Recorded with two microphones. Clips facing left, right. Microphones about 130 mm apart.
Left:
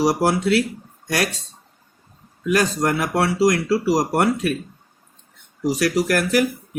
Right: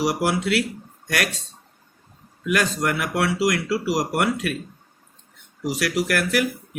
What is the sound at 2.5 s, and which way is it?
Speech, 35° left (ahead or behind).